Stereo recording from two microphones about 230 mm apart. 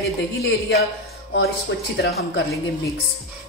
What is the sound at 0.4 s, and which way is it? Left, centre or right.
Speech, left.